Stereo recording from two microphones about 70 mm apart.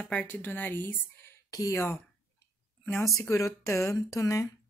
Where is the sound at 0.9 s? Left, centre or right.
Left.